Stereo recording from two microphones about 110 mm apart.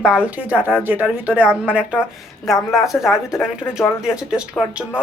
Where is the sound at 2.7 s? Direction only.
Centre (ahead or behind).